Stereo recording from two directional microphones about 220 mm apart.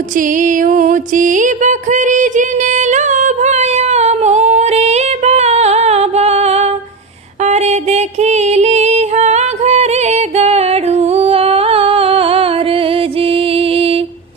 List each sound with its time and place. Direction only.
0.2 s music: 35° right (ahead or behind)